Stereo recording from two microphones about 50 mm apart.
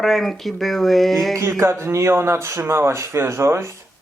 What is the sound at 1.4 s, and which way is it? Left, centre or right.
Speech, right.